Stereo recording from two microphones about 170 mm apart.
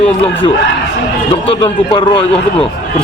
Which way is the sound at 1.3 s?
35° left (ahead or behind).